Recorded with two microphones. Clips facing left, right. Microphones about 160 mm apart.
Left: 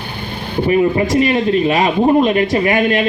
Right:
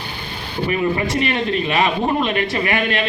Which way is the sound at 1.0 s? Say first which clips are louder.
Left 6 dB; 40° left (ahead or behind).